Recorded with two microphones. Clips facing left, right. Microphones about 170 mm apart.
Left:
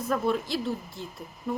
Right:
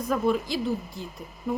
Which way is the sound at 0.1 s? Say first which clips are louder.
Right 2 dB; centre (ahead or behind).